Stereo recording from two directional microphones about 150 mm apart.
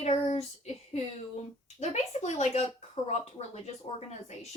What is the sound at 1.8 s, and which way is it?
Speech, 50° left (ahead or behind).